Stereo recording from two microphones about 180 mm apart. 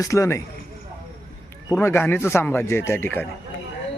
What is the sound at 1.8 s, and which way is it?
A man's voice, 15° left (ahead or behind).